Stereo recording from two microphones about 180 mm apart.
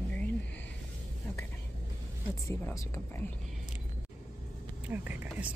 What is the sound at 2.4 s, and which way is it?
Speech, 15° left (ahead or behind).